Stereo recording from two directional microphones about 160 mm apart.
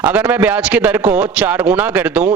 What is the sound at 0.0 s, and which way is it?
Speech, 10° right (ahead or behind).